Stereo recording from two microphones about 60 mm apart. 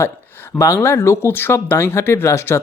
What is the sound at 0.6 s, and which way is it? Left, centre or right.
Speech, left.